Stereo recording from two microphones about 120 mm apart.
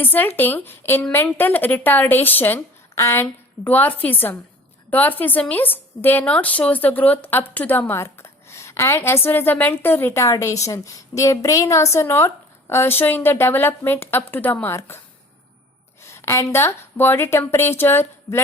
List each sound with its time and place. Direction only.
0.0 s a woman's voice: 15° left (ahead or behind)